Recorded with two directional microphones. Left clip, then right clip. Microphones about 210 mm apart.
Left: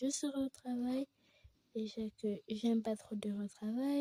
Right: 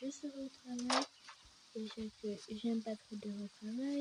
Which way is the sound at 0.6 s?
15° left (ahead or behind).